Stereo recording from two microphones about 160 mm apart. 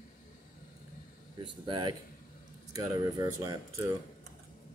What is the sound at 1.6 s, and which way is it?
Speech, 30° right (ahead or behind).